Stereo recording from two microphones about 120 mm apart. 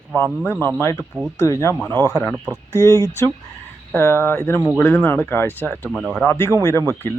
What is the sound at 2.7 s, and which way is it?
Speech, 25° left (ahead or behind).